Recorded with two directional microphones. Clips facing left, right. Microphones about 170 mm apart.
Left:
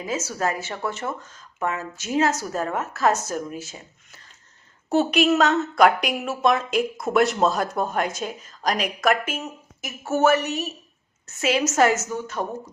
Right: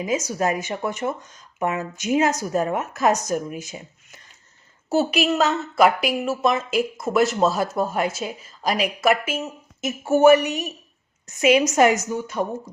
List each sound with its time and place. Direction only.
0.0 s speech: 15° right (ahead or behind)
4.9 s a woman's voice: 5° right (ahead or behind)